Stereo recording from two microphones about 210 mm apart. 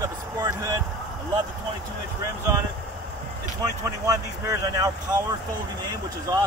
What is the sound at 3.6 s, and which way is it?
Speech, 15° right (ahead or behind).